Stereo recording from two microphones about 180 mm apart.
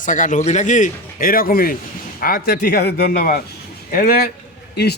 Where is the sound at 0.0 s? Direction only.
45° left (ahead or behind).